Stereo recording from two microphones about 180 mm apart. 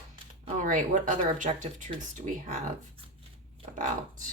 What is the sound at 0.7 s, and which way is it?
Speech, 45° right (ahead or behind).